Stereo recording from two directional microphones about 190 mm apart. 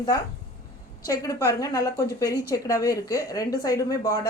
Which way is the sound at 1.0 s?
15° left (ahead or behind).